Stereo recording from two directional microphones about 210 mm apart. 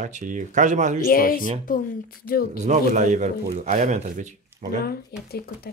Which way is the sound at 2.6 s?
35° right (ahead or behind).